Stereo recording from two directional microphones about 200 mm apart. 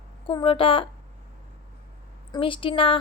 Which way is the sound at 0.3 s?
25° left (ahead or behind).